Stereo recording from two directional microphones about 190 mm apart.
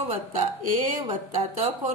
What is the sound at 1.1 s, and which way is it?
Speech, 25° right (ahead or behind).